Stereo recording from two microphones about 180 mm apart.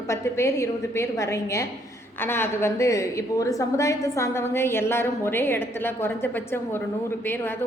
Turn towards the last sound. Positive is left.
turn(degrees=10)  # may be behind; listen again after turning